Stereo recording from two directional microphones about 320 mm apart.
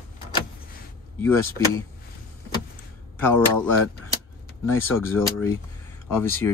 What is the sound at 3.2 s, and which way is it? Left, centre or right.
Speech, centre.